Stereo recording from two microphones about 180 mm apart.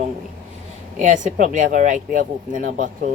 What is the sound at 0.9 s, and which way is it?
A woman's voice, 45° right (ahead or behind).